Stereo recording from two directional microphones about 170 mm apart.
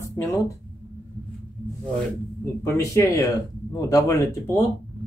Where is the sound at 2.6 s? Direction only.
15° left (ahead or behind).